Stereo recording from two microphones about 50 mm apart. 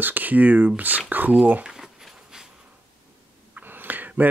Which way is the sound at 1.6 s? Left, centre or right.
Centre.